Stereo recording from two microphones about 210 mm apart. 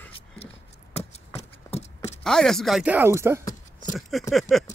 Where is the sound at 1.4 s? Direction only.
30° left (ahead or behind).